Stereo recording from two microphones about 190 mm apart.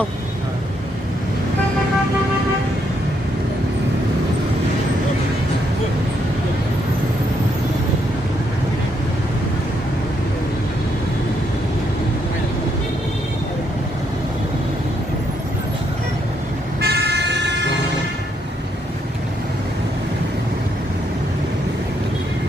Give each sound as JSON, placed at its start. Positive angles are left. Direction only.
{"t": 16.8, "sound": "vehicle", "side_deg": -60}